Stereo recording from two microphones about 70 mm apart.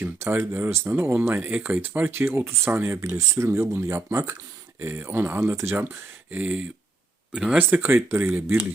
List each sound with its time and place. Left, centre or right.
0.0 s speech: right
5.0 s speech: right; by 7.6 s centre
7.7 s speech: right